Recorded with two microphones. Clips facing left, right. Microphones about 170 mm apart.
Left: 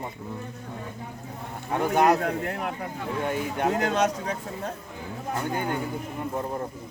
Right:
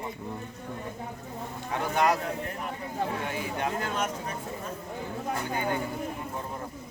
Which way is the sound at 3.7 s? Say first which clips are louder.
Left 7 dB; 75° left (ahead or behind).